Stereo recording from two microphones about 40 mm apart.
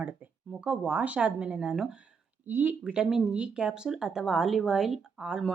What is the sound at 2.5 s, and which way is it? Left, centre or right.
Speech, right.